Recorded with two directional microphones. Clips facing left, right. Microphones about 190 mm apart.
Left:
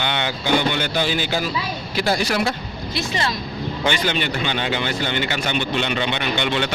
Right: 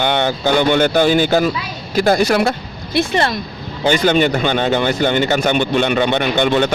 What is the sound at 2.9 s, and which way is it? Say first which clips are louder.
Speech: right 8 dB; 55° right (ahead or behind).